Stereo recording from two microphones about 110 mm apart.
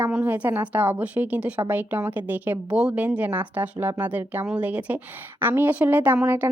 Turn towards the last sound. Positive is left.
turn(degrees=-15)  # may be behind; listen again after turning